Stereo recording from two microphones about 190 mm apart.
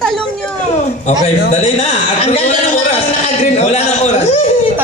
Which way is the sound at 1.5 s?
35° left (ahead or behind).